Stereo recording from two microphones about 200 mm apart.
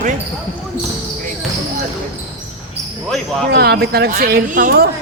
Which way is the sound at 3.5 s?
50° right (ahead or behind).